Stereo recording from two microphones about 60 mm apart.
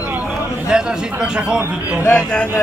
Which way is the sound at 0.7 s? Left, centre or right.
Centre.